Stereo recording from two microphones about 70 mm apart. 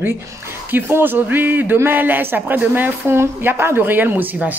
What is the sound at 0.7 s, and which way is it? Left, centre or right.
A man's voice, right.